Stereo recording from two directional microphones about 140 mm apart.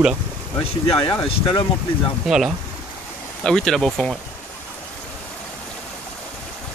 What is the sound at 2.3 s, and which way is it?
Speech, 5° right (ahead or behind).